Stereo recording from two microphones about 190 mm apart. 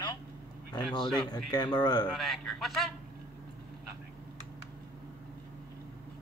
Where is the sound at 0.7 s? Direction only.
25° left (ahead or behind).